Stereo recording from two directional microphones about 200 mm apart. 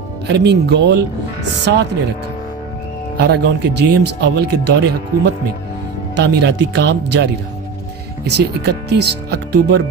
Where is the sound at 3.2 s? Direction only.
55° right (ahead or behind).